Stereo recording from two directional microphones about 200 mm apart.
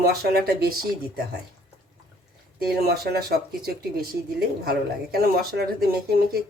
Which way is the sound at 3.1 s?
50° right (ahead or behind).